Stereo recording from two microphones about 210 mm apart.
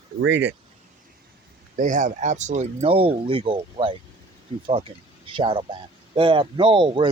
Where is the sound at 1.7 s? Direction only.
35° right (ahead or behind).